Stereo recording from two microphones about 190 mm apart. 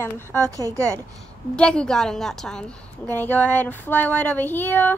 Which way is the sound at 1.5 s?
5° left (ahead or behind).